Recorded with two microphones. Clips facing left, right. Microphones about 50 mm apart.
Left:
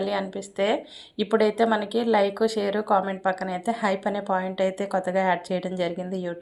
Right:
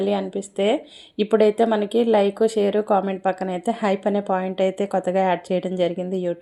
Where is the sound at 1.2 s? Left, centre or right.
Right.